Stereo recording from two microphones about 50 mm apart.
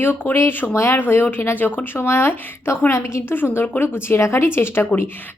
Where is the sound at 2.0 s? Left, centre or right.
Left.